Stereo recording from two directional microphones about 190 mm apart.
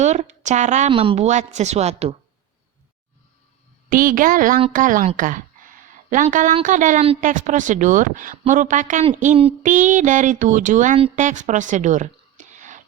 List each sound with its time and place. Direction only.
0.0 s a woman's voice: 35° right (ahead or behind)
3.8 s a woman's voice: 50° right (ahead or behind)